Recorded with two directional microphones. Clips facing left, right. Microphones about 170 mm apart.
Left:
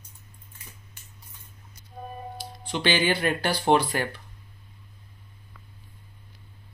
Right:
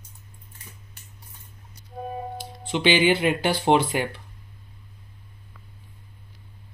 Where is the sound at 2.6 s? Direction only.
20° right (ahead or behind).